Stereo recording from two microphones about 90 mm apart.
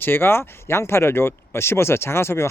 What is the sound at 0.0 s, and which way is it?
Speech, 25° left (ahead or behind).